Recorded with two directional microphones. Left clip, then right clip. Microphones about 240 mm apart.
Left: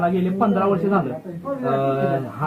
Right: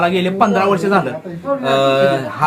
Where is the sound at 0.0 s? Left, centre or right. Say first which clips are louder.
Right 6 dB; right.